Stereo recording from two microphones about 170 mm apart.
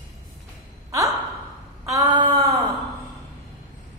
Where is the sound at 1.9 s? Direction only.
25° right (ahead or behind).